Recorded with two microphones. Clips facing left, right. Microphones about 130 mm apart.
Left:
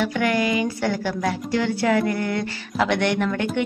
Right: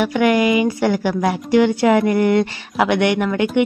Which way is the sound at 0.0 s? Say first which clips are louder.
Right 6 dB; 15° right (ahead or behind).